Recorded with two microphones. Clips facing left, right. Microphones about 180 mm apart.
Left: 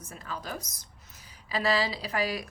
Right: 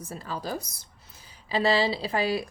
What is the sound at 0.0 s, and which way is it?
A woman's voice, 35° right (ahead or behind).